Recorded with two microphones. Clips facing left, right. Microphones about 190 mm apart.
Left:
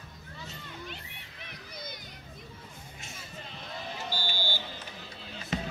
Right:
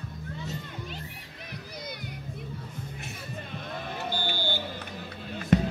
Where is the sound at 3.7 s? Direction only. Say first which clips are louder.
Right 3 dB; 55° right (ahead or behind).